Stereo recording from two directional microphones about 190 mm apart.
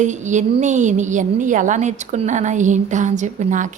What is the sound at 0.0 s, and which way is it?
A woman's voice, 40° right (ahead or behind).